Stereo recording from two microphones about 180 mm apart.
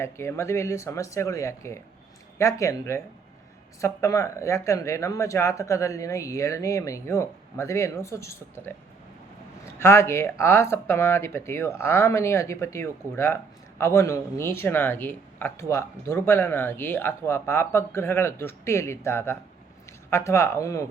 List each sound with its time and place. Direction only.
0.0 s speech: 15° left (ahead or behind)